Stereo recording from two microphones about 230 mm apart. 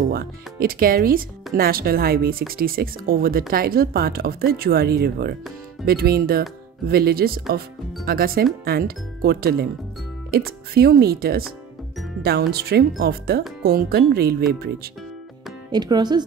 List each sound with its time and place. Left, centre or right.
0.1 s speech: right
15.7 s speech: centre